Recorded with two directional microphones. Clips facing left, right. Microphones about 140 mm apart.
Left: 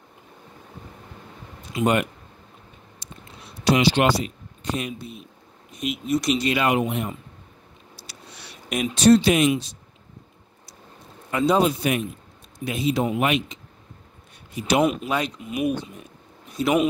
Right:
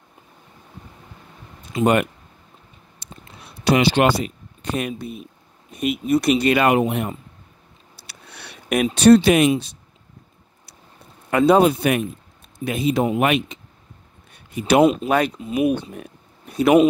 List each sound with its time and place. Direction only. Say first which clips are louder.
3.0 s a sound: right 2 dB; 60° right (ahead or behind)
3.6 s speech: right 2 dB; 55° right (ahead or behind)
8.1 s a sound: right 3 dB; 60° right (ahead or behind)
8.9 s speech: right 3 dB; 60° right (ahead or behind)
11.2 s speech: right 5 dB; 60° right (ahead or behind)
14.8 s speech: right 6 dB; 30° right (ahead or behind)
15.0 s speech: right 6 dB; 55° right (ahead or behind)
15.3 s speech: right 6 dB; 30° right (ahead or behind)
15.6 s speech: right 4 dB; 60° right (ahead or behind)